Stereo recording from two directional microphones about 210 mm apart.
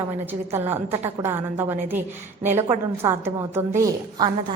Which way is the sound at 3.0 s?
10° right (ahead or behind).